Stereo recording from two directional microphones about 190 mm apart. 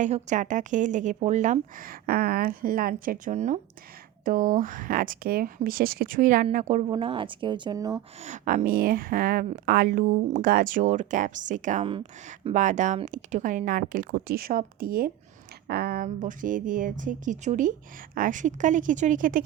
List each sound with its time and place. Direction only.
0.0 s a woman's voice: 40° right (ahead or behind)
6.8 s speech: 25° right (ahead or behind)
8.2 s speech: 40° right (ahead or behind)
16.0 s speech: 45° right (ahead or behind)